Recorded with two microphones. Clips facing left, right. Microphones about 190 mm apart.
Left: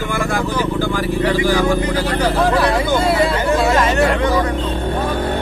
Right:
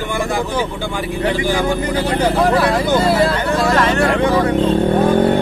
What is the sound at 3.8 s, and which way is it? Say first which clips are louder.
Vehicle: even; 10° left (ahead or behind).